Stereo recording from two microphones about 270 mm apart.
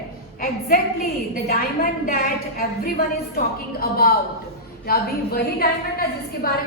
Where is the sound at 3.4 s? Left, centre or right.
Left.